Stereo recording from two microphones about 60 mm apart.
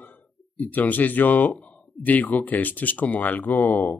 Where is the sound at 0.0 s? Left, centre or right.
Left.